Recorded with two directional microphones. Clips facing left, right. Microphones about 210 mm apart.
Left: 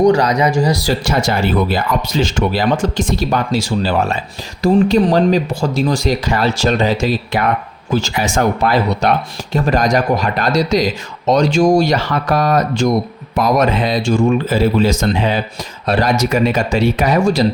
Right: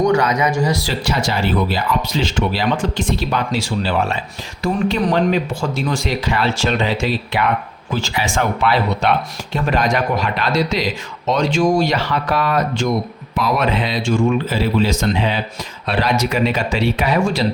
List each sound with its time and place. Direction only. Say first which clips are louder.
0.0 s speech: left 4 dB; 35° left (ahead or behind)